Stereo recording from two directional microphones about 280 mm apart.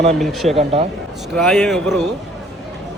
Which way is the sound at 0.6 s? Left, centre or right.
Right.